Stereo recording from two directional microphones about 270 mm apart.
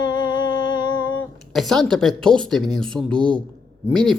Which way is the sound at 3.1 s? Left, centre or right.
Centre.